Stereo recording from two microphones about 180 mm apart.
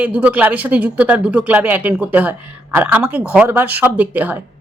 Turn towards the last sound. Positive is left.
turn(degrees=-10)  # may be behind; listen again after turning